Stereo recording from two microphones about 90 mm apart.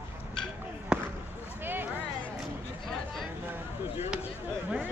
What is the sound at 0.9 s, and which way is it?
Basketball bounce, 10° right (ahead or behind).